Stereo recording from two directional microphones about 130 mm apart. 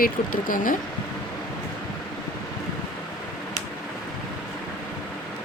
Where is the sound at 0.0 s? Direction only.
90° left.